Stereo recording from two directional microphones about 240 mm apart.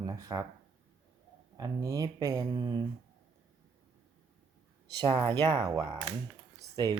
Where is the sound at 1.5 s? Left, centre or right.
Centre.